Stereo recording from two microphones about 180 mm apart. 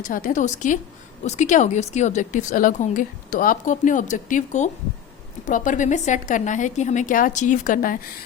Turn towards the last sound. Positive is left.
turn(degrees=50)  # may be behind; listen again after turning